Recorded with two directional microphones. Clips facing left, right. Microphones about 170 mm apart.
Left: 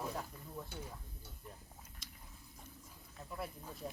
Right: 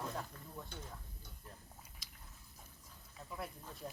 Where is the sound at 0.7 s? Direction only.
10° left (ahead or behind).